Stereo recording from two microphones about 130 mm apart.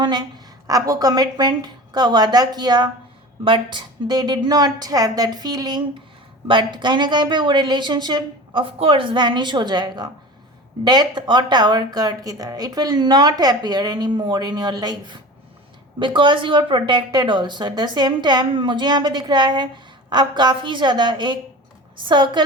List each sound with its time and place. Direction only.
0.0 s speech: 35° right (ahead or behind)